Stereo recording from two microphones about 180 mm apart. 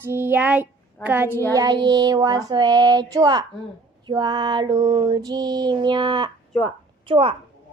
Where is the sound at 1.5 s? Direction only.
25° right (ahead or behind).